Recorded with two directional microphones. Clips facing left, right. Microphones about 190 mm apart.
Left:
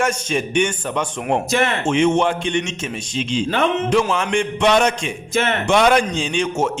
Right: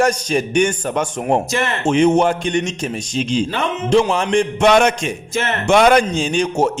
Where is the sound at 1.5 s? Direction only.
55° left (ahead or behind).